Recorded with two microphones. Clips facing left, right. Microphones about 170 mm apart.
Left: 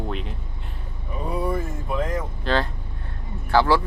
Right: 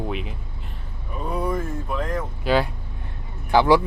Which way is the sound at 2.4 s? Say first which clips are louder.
Right 4 dB; 10° right (ahead or behind).